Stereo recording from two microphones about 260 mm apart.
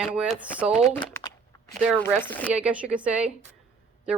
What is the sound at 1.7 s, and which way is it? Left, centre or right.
Speech, centre.